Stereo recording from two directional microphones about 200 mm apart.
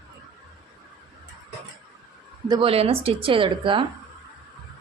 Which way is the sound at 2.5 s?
25° right (ahead or behind).